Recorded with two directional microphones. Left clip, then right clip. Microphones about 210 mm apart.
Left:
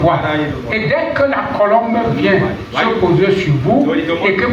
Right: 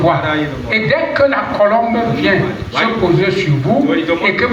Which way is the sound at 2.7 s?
50° right (ahead or behind).